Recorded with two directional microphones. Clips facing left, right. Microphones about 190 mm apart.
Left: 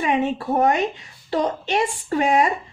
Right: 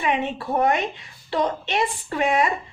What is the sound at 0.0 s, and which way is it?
A woman's voice, 40° left (ahead or behind).